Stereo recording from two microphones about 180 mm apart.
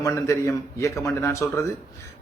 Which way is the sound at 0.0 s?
15° left (ahead or behind).